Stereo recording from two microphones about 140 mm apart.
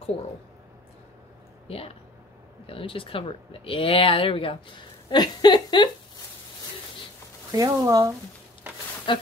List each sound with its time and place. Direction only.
1.7 s speech: 45° left (ahead or behind)
5.1 s speech: 30° left (ahead or behind)
7.5 s speech: 25° right (ahead or behind)
9.1 s speech: 35° left (ahead or behind)